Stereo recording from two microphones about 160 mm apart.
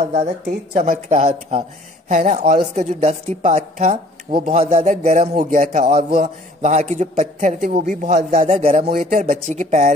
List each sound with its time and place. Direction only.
0.0 s a man's voice: 45° right (ahead or behind)
0.7 s a man's voice: 55° right (ahead or behind)